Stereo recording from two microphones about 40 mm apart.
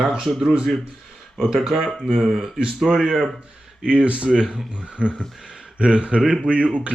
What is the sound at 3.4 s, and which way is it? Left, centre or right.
A man's voice, right.